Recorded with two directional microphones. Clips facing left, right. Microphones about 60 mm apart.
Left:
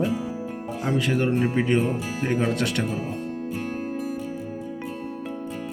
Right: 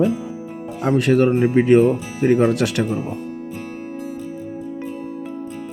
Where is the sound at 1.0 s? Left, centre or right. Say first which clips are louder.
Right 8 dB; right.